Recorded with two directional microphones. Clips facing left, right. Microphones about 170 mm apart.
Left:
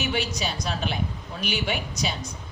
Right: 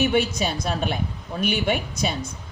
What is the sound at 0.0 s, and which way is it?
A woman's voice, 50° right (ahead or behind).